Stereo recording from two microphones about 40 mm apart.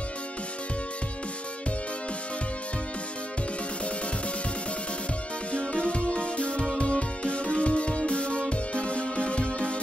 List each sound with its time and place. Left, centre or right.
5.5 s music: left